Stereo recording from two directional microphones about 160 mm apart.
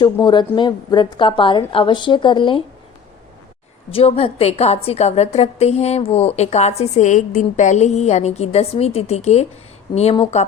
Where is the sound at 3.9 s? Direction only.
35° left (ahead or behind).